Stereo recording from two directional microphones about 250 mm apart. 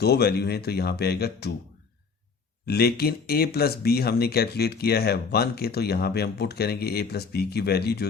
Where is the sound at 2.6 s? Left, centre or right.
Left.